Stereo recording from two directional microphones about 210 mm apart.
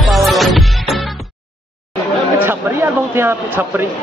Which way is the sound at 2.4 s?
10° right (ahead or behind).